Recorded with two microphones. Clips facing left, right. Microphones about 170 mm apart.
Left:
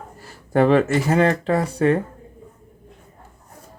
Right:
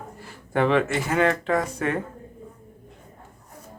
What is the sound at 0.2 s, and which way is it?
Speech, 40° left (ahead or behind).